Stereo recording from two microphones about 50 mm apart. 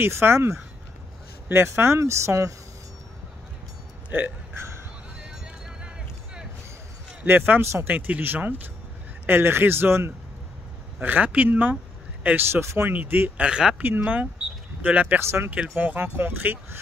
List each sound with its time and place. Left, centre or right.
0.0 s speech: right
4.1 s a sound: right
7.2 s speech: right
9.3 s speech: right
11.0 s a man's voice: right
12.4 s speech: right
12.9 s speech: right
13.4 s speech: centre
13.8 s speech: right
15.1 s speech: right
15.5 s speech: right
16.0 s speech: right